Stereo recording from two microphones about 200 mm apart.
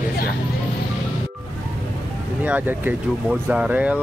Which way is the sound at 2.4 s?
10° right (ahead or behind).